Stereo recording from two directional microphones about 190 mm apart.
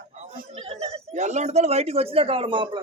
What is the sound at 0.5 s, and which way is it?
Speech, 30° right (ahead or behind).